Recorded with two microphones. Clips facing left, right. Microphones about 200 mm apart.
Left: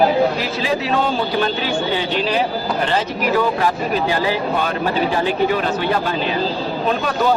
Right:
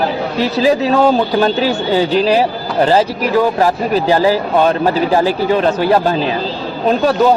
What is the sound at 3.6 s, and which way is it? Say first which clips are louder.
Speech: right 5 dB; 35° right (ahead or behind).